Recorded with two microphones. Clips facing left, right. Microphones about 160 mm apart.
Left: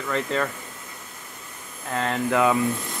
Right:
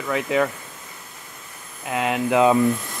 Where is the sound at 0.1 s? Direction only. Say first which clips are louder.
Right 4 dB; 5° right (ahead or behind).